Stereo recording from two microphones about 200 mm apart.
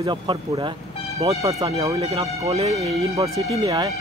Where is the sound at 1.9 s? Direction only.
30° right (ahead or behind).